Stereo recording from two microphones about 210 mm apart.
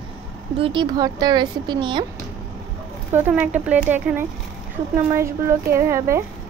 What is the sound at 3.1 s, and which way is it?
Speech, 10° right (ahead or behind).